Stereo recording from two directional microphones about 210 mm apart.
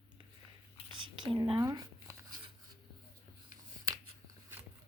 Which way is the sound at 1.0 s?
20° right (ahead or behind).